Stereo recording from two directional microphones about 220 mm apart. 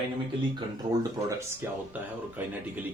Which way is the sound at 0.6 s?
15° right (ahead or behind).